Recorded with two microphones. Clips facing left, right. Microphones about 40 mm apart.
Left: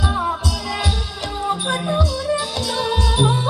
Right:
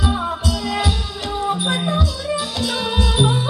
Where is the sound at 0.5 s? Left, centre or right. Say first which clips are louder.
Right 2 dB; right.